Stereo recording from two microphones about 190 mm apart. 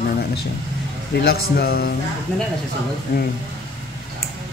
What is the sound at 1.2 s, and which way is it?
Speech, 55° left (ahead or behind).